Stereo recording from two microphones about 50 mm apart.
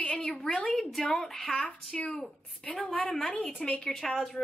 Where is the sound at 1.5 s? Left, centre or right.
Left.